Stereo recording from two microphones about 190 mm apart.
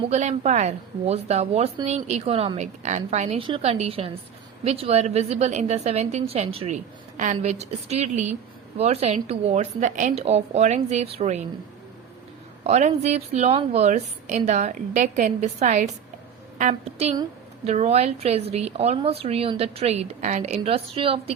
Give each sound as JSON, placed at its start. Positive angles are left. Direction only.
{"t": 0.1, "sound": "a woman's voice", "side_deg": -35}
{"t": 12.6, "sound": "a woman's voice", "side_deg": -35}